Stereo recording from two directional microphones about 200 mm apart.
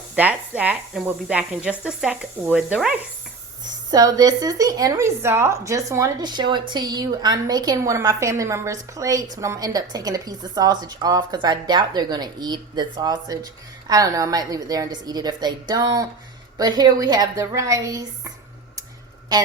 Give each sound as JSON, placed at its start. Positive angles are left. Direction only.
{"t": 0.2, "sound": "speech", "side_deg": -5}
{"t": 3.9, "sound": "speech", "side_deg": -20}